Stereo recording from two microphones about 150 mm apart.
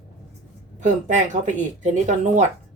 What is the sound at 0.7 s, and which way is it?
Speech, 55° right (ahead or behind).